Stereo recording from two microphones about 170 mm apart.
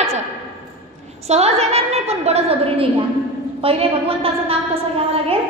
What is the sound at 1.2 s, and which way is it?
A woman's voice, 40° right (ahead or behind).